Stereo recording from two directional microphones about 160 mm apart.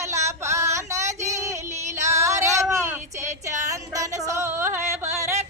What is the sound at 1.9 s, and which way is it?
Music, 20° right (ahead or behind).